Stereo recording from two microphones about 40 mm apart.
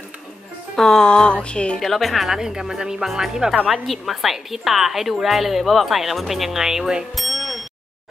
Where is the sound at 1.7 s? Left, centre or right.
Centre.